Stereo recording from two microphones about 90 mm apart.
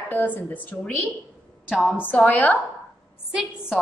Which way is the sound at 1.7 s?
Centre (ahead or behind).